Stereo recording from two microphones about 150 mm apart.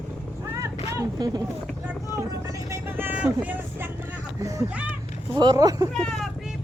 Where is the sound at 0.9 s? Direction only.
25° right (ahead or behind).